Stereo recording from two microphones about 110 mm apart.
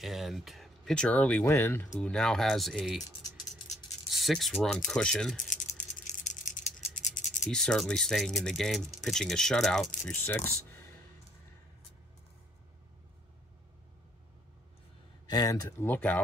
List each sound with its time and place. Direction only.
0.0 s speech: centre (ahead or behind)
1.5 s speech: 20° left (ahead or behind)
2.0 s speech: 5° left (ahead or behind)
4.1 s speech: centre (ahead or behind)
5.7 s a sound: 90° left
7.4 s speech: 5° left (ahead or behind)
15.2 s speech: 35° left (ahead or behind)
15.8 s speech: 15° left (ahead or behind)